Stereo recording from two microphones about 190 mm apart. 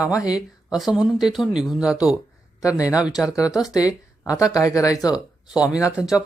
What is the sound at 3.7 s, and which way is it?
Speech, 20° left (ahead or behind).